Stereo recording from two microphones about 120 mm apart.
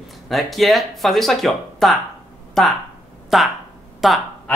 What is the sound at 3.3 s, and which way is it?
Speech, centre (ahead or behind).